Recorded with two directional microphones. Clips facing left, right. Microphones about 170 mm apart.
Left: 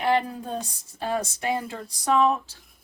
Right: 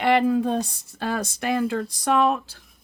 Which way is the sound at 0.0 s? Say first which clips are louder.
Right 5 dB; 90° right.